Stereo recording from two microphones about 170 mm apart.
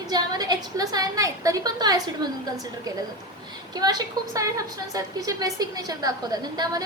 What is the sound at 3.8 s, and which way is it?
A woman's voice, 20° right (ahead or behind).